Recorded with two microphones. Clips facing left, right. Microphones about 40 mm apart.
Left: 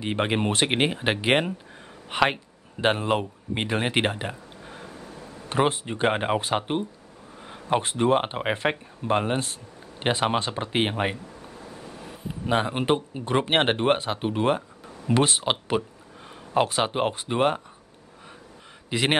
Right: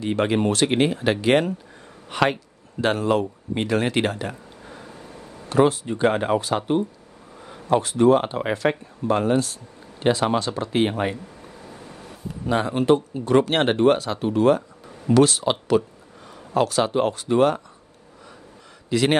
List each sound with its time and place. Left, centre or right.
0.0 s speech: left
5.5 s speech: left
12.3 s speech: left
16.5 s speech: left
18.9 s speech: left